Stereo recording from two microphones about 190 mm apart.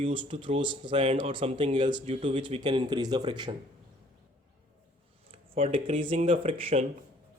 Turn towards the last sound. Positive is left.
turn(degrees=-30)  # may be behind; listen again after turning